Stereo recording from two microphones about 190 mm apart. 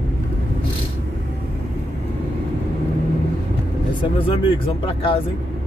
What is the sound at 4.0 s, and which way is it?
Speech, 25° left (ahead or behind).